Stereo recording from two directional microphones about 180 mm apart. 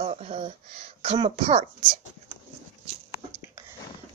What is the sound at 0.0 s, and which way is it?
Speech, 35° right (ahead or behind).